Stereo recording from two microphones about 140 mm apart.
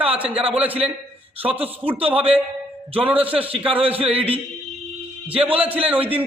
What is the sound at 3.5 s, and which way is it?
Speech, 40° right (ahead or behind).